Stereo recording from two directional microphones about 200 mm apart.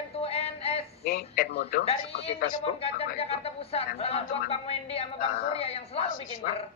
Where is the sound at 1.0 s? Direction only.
45° left (ahead or behind).